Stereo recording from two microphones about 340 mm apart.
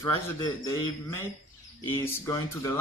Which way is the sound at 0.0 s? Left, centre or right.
Centre.